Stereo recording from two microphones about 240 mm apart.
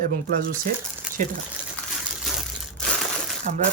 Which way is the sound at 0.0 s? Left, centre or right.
Right.